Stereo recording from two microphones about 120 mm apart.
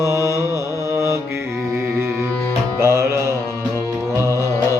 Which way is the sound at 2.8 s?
20° right (ahead or behind).